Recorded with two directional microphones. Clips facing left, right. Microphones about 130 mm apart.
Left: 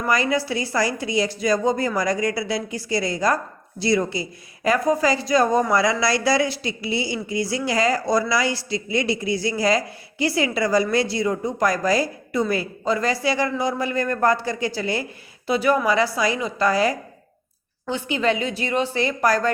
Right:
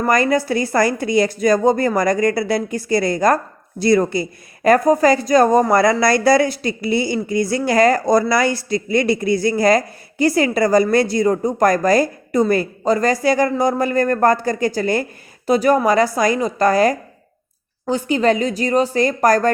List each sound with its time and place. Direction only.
0.0 s a woman's voice: 50° right (ahead or behind)